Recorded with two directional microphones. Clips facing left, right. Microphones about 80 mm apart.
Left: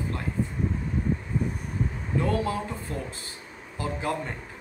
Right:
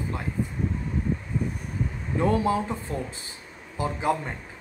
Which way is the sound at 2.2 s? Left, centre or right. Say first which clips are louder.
Right 6 dB; right.